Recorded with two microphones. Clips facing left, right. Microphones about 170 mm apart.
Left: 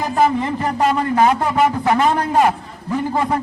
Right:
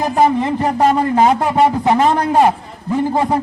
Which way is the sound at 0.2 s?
35° right (ahead or behind).